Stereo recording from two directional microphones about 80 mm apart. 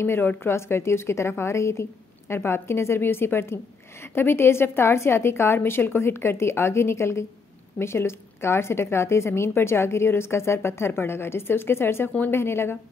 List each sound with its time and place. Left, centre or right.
0.0 s a woman's voice: left